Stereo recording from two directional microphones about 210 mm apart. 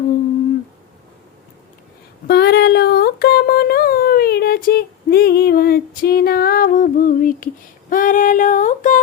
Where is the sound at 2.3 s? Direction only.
50° left (ahead or behind).